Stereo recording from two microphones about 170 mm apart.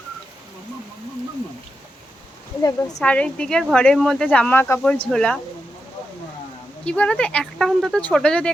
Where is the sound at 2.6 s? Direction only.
20° left (ahead or behind).